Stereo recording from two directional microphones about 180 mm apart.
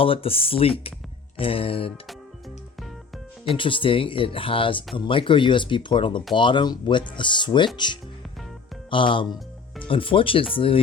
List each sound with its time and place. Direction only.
0.0 s speech: 30° left (ahead or behind)
3.5 s speech: 30° left (ahead or behind)
8.9 s speech: 30° left (ahead or behind)